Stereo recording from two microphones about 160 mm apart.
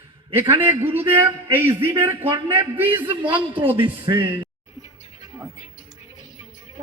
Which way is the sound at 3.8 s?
30° right (ahead or behind).